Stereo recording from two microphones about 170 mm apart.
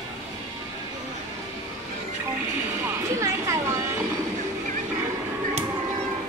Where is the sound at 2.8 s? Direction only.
15° right (ahead or behind).